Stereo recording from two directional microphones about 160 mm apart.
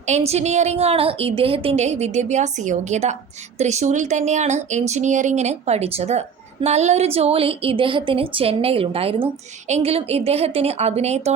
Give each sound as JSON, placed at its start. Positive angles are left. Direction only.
{"t": 0.0, "sound": "a woman's voice", "side_deg": -45}